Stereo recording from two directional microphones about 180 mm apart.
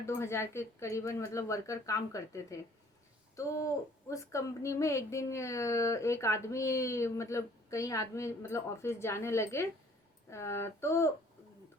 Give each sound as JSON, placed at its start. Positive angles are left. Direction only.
{"t": 0.0, "sound": "a woman's voice", "side_deg": 15}